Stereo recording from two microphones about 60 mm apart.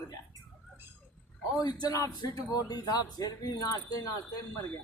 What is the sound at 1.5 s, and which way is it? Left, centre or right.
A man's voice, left.